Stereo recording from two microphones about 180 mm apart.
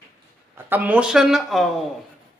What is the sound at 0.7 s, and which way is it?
Speech, 10° right (ahead or behind).